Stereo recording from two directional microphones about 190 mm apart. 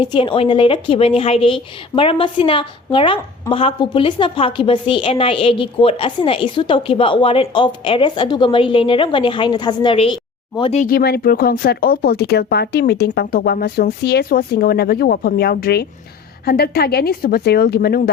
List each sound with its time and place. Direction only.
0.0 s a woman's voice: 25° left (ahead or behind)
10.8 s speech: 55° left (ahead or behind)